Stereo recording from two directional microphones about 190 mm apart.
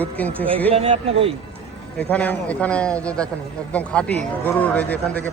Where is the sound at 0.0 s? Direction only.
10° left (ahead or behind).